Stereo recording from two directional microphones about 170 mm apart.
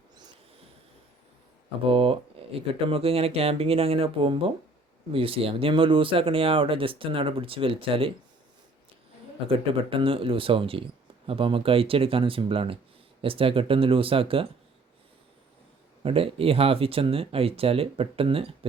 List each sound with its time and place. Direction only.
1.8 s speech: 35° right (ahead or behind)
9.5 s speech: 30° right (ahead or behind)
16.0 s speech: 35° right (ahead or behind)